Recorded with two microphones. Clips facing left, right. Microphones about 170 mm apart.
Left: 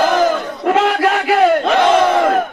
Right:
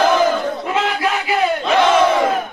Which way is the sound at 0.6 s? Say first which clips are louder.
Left 11 dB; 60° left (ahead or behind).